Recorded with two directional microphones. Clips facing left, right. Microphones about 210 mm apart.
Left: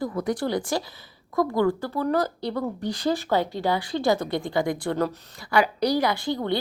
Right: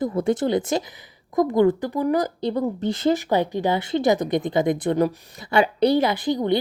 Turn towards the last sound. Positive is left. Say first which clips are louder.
# right 4 dB
turn(degrees=-20)  # may be behind; listen again after turning